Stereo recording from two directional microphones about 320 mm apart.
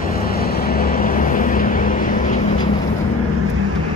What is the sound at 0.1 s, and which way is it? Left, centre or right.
Vehicle, left.